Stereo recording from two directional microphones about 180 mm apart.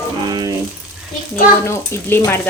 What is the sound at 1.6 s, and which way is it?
Speech, 15° left (ahead or behind).